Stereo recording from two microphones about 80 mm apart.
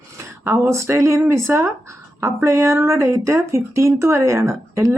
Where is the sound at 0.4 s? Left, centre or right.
Right.